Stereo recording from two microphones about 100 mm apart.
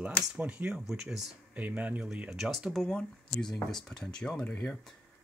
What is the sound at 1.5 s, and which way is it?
Speech, 15° right (ahead or behind).